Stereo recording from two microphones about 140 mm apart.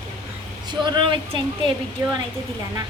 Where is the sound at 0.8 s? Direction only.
35° right (ahead or behind).